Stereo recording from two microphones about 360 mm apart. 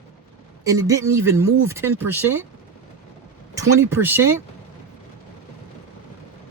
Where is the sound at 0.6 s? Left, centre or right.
Centre.